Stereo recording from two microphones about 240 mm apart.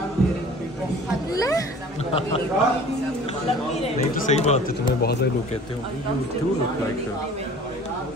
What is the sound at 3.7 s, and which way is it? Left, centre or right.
Speech, left.